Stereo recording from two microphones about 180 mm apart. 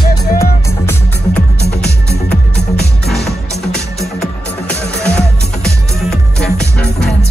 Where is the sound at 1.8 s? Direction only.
65° left (ahead or behind).